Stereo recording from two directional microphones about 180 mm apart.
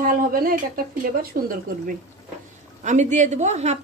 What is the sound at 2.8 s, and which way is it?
Speech, 40° right (ahead or behind).